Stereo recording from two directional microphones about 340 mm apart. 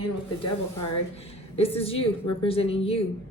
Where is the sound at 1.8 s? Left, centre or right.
Centre.